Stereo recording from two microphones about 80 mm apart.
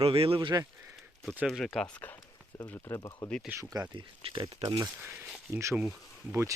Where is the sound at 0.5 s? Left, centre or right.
Right.